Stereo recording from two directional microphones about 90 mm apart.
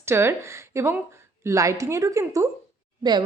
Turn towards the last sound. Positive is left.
turn(degrees=-55)  # may be behind; listen again after turning